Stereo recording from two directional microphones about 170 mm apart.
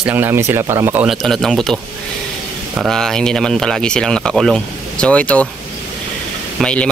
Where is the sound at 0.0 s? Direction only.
15° right (ahead or behind).